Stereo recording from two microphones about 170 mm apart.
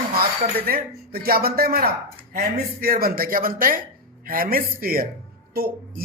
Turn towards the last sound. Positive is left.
turn(degrees=-60)  # may be behind; listen again after turning